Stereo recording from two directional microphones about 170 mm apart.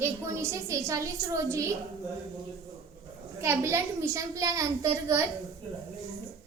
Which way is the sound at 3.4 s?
15° right (ahead or behind).